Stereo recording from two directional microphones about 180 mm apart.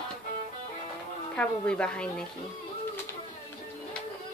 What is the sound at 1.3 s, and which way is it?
Speech, 5° left (ahead or behind).